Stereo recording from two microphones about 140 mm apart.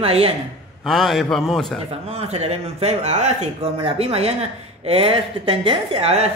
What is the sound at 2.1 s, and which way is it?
A woman's voice, 50° right (ahead or behind).